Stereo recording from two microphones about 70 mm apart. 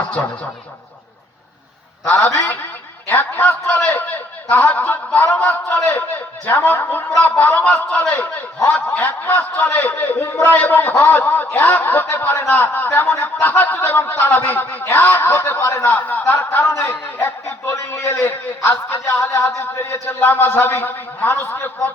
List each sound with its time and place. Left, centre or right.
2.0 s a man's voice: left
3.1 s a sound: left
3.8 s a man's voice: left